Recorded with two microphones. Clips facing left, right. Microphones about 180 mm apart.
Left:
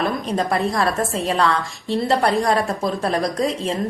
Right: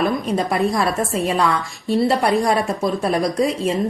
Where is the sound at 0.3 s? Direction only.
15° right (ahead or behind).